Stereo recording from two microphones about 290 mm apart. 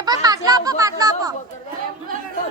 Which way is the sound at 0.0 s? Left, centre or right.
Centre.